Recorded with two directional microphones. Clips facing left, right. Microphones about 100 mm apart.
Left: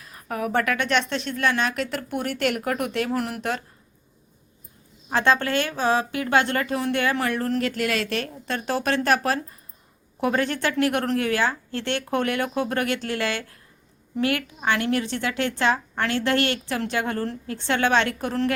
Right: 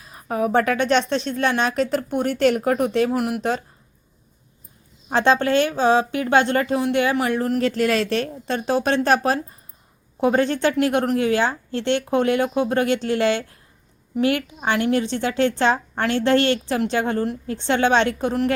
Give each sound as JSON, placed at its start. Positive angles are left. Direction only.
{"t": 0.0, "sound": "a woman's voice", "side_deg": -20}
{"t": 3.1, "sound": "speech", "side_deg": -10}
{"t": 5.0, "sound": "a woman's voice", "side_deg": -25}
{"t": 7.6, "sound": "a woman's voice", "side_deg": -35}